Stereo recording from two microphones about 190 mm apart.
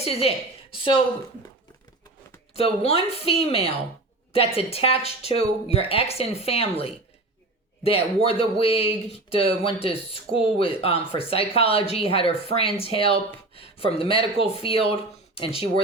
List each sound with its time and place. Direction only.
0.0 s a woman's voice: 30° left (ahead or behind)
2.5 s speech: 35° left (ahead or behind)